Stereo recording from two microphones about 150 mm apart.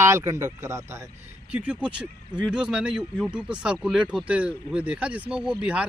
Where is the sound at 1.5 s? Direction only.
10° right (ahead or behind).